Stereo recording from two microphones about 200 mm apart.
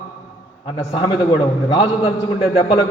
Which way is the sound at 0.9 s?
25° left (ahead or behind).